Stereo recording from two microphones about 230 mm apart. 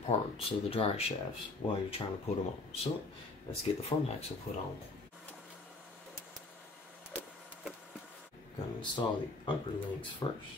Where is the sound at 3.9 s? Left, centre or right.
Centre.